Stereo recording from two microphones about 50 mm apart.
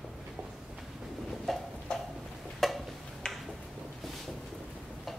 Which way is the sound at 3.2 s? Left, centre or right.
Centre.